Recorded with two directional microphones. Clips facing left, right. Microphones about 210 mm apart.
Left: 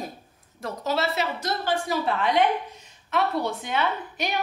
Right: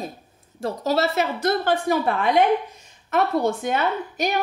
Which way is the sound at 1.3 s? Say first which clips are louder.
Right 6 dB; 55° right (ahead or behind).